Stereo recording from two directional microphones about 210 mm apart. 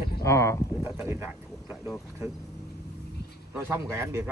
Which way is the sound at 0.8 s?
10° right (ahead or behind).